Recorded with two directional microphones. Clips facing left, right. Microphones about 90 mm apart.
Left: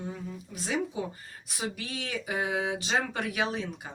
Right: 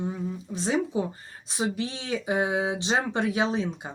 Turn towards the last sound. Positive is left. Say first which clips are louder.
# right 5 dB
turn(degrees=-25)  # may be behind; listen again after turning